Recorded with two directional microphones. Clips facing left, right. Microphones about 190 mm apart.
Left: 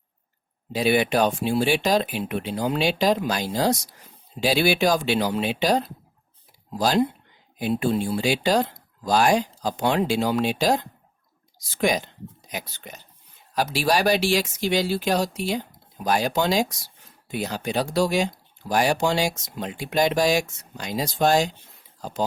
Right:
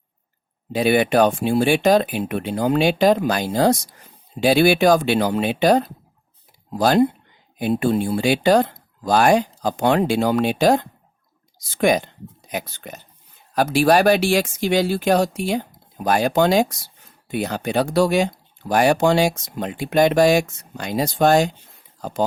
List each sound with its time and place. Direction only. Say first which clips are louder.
0.7 s speech: right 4 dB; 55° right (ahead or behind)